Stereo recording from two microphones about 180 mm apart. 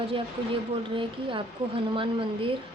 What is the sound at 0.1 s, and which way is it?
A woman's voice, 30° right (ahead or behind).